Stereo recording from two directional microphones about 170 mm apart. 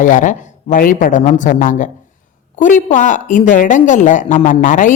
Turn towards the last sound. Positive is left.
turn(degrees=50)  # may be behind; listen again after turning